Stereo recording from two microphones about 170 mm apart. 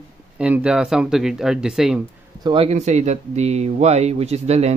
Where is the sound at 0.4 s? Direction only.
5° right (ahead or behind).